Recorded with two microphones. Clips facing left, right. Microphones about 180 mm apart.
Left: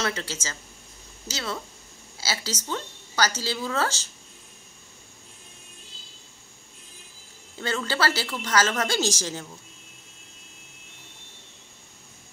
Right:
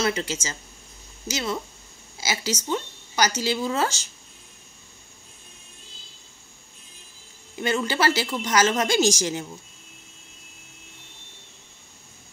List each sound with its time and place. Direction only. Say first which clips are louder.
0.0 s a woman's voice: right 4 dB; 15° right (ahead or behind)
7.5 s a woman's voice: right 4 dB; 15° right (ahead or behind)